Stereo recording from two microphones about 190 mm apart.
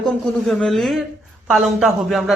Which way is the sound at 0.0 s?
Centre (ahead or behind).